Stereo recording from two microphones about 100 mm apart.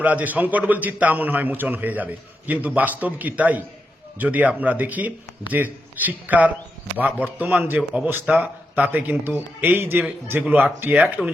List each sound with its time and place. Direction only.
0.0 s a man's voice: 15° right (ahead or behind)